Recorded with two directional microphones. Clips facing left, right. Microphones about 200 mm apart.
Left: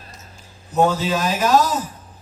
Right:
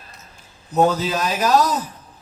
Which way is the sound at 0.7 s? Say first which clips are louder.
Even; 35° right (ahead or behind).